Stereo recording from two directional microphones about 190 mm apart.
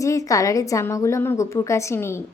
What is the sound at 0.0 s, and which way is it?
Speech, 15° left (ahead or behind).